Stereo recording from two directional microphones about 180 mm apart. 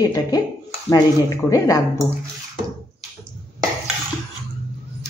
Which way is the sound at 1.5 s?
20° left (ahead or behind).